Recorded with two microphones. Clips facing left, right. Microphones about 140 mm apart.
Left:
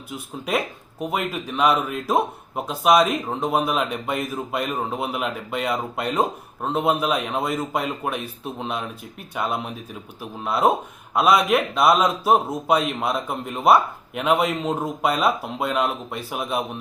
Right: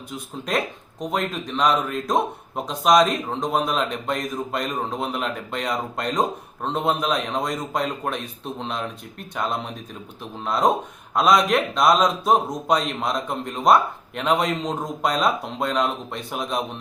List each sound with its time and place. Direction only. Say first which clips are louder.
0.1 s a man's voice: left 1 dB; 5° left (ahead or behind)